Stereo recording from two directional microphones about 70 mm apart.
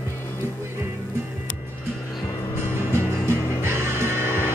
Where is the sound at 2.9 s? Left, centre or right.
Right.